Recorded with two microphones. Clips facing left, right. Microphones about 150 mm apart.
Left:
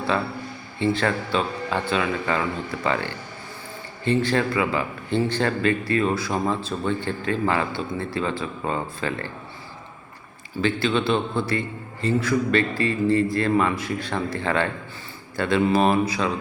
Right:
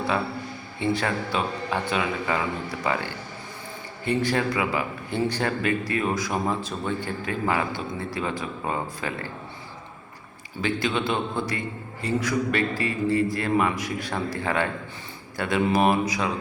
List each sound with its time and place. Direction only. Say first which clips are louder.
0.8 s a man's voice: left 3 dB; 10° right (ahead or behind)
10.6 s a man's voice: left 3 dB; 15° right (ahead or behind)